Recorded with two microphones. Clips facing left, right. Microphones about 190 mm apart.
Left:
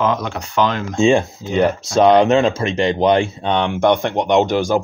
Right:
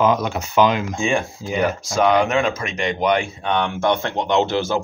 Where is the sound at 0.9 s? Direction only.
25° left (ahead or behind).